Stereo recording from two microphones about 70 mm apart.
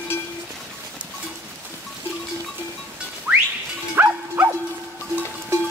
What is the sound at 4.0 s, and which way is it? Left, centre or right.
Livestock, right.